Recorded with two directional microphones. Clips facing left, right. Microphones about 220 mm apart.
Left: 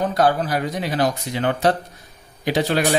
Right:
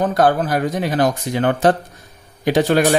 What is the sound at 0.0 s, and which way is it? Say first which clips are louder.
Speech: right 3 dB; 50° right (ahead or behind).